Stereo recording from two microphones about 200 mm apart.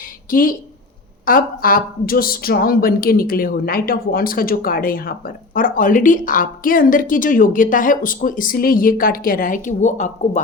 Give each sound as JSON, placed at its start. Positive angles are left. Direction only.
{"t": 0.3, "sound": "a woman's voice", "side_deg": 45}